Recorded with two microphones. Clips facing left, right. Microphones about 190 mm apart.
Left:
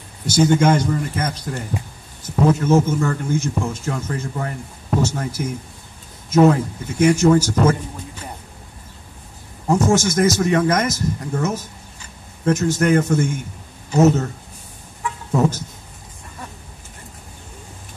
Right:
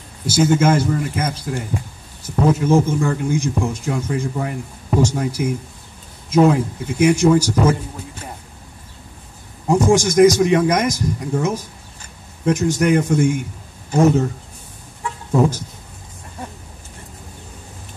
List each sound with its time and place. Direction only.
0.3 s speech: 5° right (ahead or behind)
2.6 s speech: 10° right (ahead or behind)
9.7 s speech: 15° right (ahead or behind)